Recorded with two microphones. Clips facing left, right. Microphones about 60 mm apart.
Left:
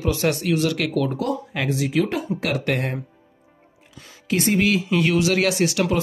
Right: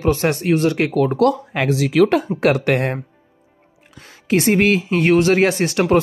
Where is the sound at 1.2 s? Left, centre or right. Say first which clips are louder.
Right 8 dB; right.